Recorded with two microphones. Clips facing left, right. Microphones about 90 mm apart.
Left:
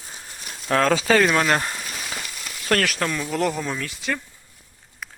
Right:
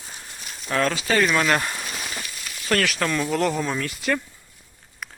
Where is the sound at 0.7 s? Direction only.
90° left.